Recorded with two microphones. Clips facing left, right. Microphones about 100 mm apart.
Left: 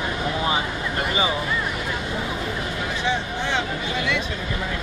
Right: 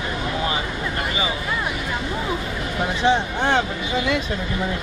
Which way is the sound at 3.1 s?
50° right (ahead or behind).